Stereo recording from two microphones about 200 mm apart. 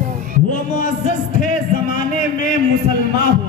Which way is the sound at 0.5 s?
40° left (ahead or behind).